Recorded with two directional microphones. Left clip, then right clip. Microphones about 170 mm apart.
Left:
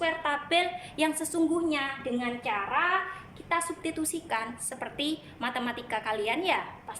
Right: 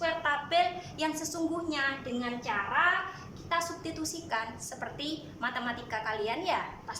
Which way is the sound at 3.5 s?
20° left (ahead or behind).